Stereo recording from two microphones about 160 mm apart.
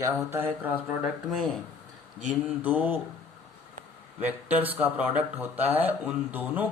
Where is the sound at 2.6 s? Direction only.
10° right (ahead or behind).